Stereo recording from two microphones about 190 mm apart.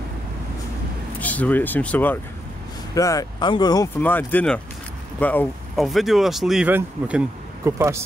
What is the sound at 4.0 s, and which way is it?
Speech, 10° left (ahead or behind).